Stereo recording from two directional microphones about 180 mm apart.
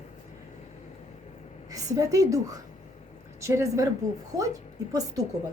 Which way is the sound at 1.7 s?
20° right (ahead or behind).